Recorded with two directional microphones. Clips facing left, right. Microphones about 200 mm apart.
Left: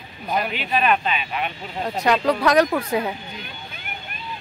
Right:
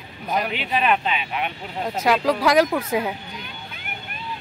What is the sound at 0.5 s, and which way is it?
Speech, 20° right (ahead or behind).